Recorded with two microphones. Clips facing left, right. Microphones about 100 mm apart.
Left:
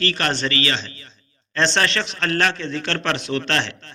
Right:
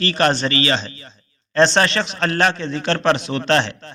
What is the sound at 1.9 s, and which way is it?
A man's voice, 10° right (ahead or behind).